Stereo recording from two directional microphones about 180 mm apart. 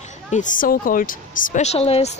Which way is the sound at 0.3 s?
45° left (ahead or behind).